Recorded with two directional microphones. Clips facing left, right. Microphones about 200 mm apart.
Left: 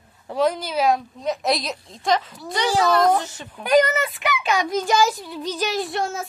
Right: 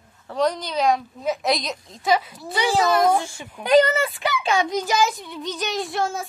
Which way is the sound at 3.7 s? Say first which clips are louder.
Right 1 dB; 30° right (ahead or behind).